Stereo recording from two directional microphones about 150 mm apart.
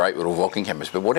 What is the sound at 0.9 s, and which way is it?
Speech, 20° left (ahead or behind).